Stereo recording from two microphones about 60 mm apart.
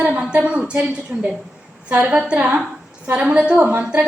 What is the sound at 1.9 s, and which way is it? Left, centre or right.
A woman's voice, right.